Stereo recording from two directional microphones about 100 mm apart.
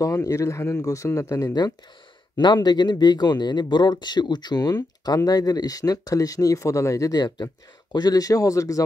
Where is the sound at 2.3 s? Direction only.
50° left (ahead or behind).